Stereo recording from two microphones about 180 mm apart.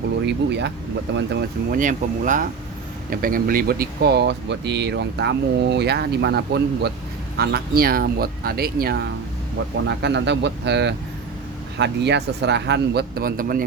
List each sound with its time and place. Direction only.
0.3 s speech: 75° right (ahead or behind)
9.8 s speech: 70° right (ahead or behind); by 13.7 s 50° right (ahead or behind)